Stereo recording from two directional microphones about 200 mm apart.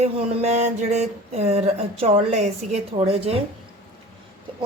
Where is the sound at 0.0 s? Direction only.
30° right (ahead or behind).